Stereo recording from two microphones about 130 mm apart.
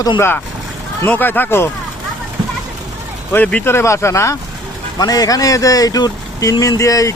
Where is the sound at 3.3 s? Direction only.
10° left (ahead or behind).